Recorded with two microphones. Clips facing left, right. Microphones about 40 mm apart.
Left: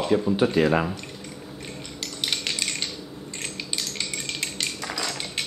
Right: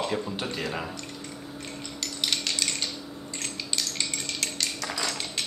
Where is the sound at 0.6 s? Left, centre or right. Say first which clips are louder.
Left 12 dB; left.